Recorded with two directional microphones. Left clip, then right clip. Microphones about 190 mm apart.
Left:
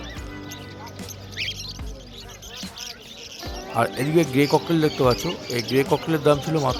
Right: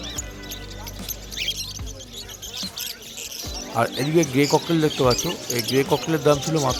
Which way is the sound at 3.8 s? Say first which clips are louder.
Even; centre (ahead or behind).